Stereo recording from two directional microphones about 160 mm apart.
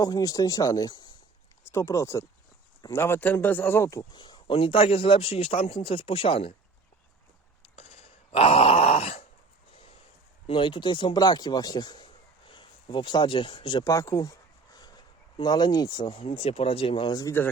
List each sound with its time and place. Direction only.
0.0 s speech: 20° left (ahead or behind)
7.6 s groan: 40° left (ahead or behind)
10.4 s speech: 30° left (ahead or behind)